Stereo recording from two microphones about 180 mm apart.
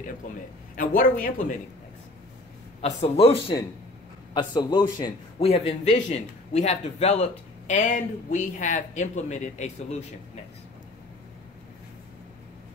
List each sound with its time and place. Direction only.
0.7 s speech: 50° left (ahead or behind)
2.8 s a man's voice: 35° left (ahead or behind)
5.5 s a man's voice: 35° left (ahead or behind)